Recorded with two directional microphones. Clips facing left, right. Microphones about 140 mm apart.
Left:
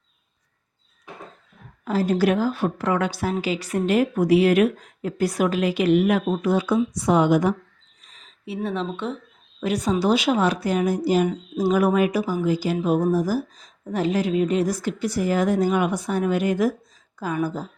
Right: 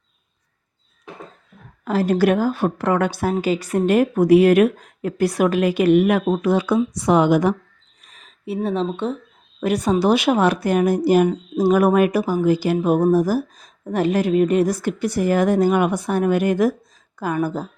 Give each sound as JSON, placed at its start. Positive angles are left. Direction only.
{"t": 1.8, "sound": "speech", "side_deg": -70}
{"t": 8.0, "sound": "a sound", "side_deg": -60}
{"t": 8.6, "sound": "speech", "side_deg": -40}
{"t": 9.6, "sound": "speech", "side_deg": -55}